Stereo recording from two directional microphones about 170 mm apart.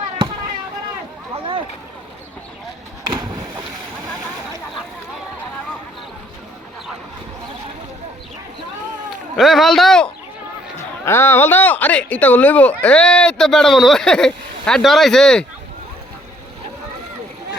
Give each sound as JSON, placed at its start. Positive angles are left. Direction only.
{"t": 1.3, "sound": "boat", "side_deg": -30}
{"t": 9.3, "sound": "a sound", "side_deg": 0}
{"t": 11.0, "sound": "speech", "side_deg": 15}